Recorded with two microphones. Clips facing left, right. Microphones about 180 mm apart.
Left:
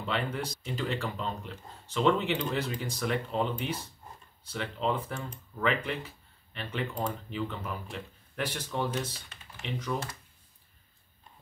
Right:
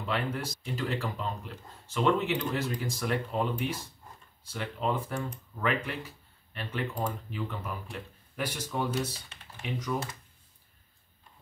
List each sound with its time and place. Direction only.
0.1 s speech: 5° right (ahead or behind)
4.5 s speech: 5° right (ahead or behind)